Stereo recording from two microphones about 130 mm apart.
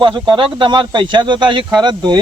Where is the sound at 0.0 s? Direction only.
35° right (ahead or behind).